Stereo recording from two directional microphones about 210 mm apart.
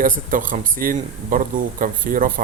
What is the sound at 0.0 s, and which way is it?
Speech, 40° right (ahead or behind).